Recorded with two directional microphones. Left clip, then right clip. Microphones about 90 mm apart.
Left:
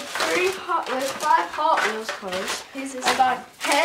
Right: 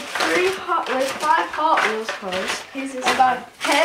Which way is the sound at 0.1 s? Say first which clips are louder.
Right 3 dB; 15° left (ahead or behind).